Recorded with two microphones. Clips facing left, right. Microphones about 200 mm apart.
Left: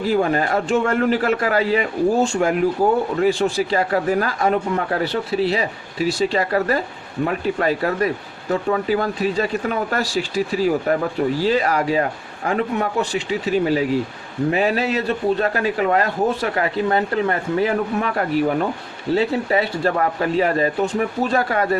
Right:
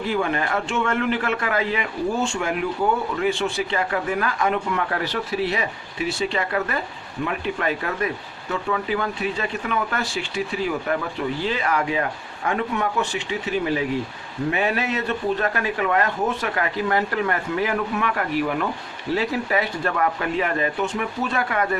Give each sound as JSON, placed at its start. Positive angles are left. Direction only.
{"t": 0.1, "sound": "a man's voice", "side_deg": 40}